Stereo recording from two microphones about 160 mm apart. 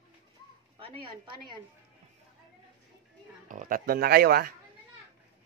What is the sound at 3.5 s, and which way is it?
Speech, 55° right (ahead or behind).